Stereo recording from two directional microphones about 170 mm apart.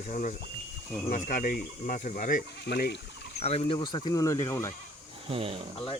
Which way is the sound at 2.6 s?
70° left (ahead or behind).